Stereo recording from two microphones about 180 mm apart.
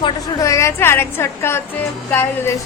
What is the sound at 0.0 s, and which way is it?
A woman's voice, 20° left (ahead or behind).